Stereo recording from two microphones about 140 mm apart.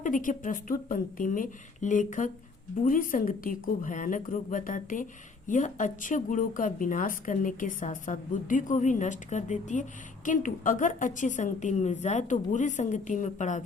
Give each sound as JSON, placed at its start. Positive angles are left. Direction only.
{"t": 0.0, "sound": "a woman's voice", "side_deg": 70}